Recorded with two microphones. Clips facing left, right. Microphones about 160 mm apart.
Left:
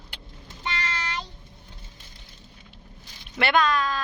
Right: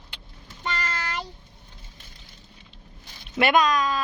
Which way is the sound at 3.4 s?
15° right (ahead or behind).